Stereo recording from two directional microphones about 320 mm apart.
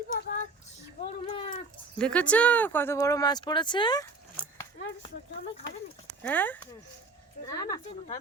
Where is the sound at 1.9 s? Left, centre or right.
Centre.